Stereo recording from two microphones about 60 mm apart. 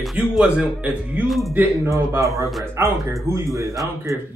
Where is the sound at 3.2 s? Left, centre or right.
Right.